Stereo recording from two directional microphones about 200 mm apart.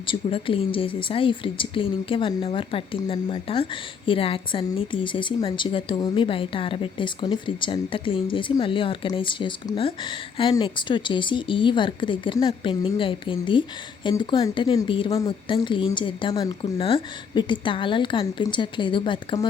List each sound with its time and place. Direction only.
0.1 s a woman's voice: 25° left (ahead or behind)